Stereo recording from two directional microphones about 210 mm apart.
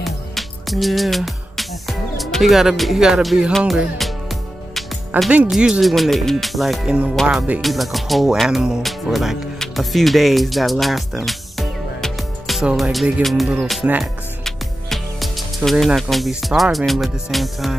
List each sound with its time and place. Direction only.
0.0 s music: centre (ahead or behind)